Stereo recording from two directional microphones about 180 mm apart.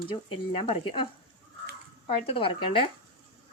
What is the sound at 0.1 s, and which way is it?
Speech, 30° left (ahead or behind).